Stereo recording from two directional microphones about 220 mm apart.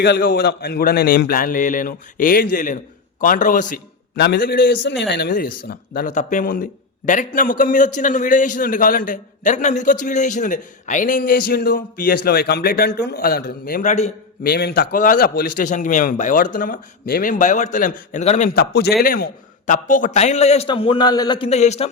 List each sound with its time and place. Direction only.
0.0 s a man's voice: 45° left (ahead or behind)
14.4 s a man's voice: 45° left (ahead or behind); by 21.8 s 30° left (ahead or behind)